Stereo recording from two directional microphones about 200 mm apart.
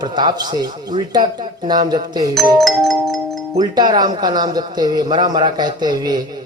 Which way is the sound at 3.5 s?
20° right (ahead or behind).